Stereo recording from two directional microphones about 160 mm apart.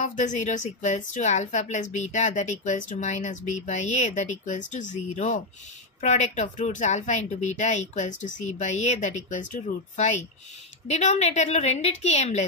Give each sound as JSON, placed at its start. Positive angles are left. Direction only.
{"t": 0.0, "sound": "a woman's voice", "side_deg": 50}